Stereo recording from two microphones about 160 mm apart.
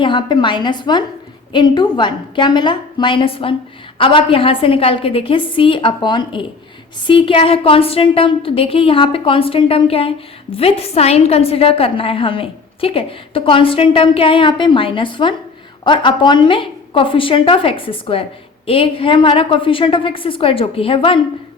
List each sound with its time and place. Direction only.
0.0 s a woman's voice: 30° left (ahead or behind)